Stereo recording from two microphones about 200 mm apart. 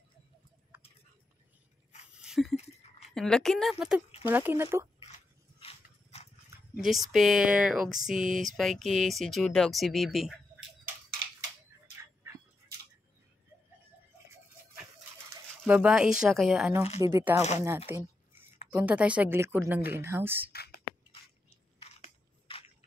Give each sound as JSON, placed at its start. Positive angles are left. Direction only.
{"t": 2.1, "sound": "a sound", "side_deg": -5}
{"t": 3.1, "sound": "speech", "side_deg": 5}
{"t": 5.0, "sound": "dog", "side_deg": 30}
{"t": 6.8, "sound": "speech", "side_deg": 0}
{"t": 8.2, "sound": "speech", "side_deg": -40}
{"t": 8.5, "sound": "speech", "side_deg": 0}
{"t": 15.6, "sound": "speech", "side_deg": -5}
{"t": 17.4, "sound": "speech", "side_deg": 35}
{"t": 17.6, "sound": "speech", "side_deg": -10}
{"t": 20.5, "sound": "beatboxing", "side_deg": 50}
{"t": 21.1, "sound": "crushing", "side_deg": 30}